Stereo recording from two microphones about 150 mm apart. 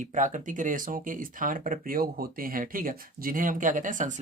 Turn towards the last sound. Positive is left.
turn(degrees=-55)  # may be behind; listen again after turning